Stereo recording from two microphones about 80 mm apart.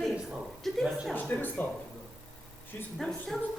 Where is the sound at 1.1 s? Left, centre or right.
Left.